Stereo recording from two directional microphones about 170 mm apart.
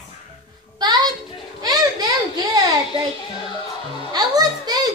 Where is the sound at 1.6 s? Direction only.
20° right (ahead or behind).